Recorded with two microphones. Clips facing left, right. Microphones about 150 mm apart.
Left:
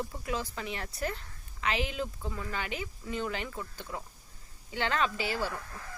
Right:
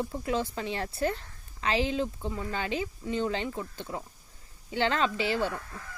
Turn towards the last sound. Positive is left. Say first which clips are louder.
# right 4 dB
turn(degrees=-25)  # may be behind; listen again after turning